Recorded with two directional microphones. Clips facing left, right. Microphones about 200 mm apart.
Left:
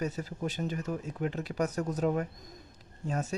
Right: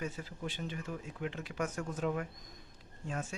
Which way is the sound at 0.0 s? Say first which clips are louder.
Left 6 dB; 40° left (ahead or behind).